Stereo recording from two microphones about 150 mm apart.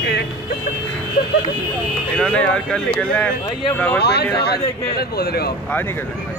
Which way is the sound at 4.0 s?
90° left.